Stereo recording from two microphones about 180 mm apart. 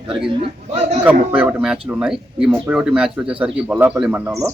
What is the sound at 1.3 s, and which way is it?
Speech, 5° right (ahead or behind).